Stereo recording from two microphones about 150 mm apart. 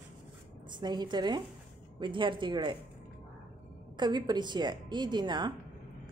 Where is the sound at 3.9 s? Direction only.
30° right (ahead or behind).